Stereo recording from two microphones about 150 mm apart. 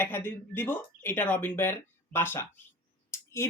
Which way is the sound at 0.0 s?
15° left (ahead or behind).